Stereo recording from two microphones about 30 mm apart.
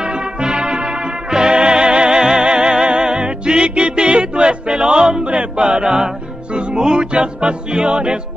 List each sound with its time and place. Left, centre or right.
0.0 s music: right
5.6 s choir: right
6.5 s music: right